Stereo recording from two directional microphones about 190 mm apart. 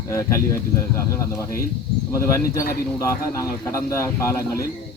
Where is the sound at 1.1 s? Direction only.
15° left (ahead or behind).